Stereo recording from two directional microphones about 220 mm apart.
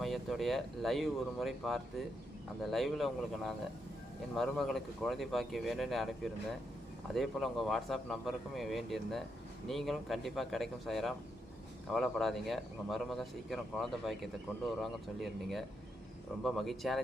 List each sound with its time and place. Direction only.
0.0 s speech: centre (ahead or behind)